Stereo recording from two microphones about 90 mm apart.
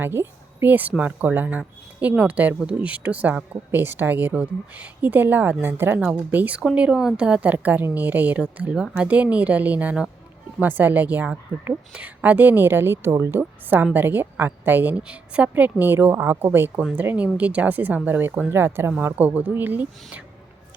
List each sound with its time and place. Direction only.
0.0 s a woman's voice: 25° right (ahead or behind)